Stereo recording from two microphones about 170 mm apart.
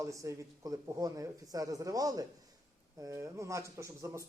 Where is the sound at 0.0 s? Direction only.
20° right (ahead or behind).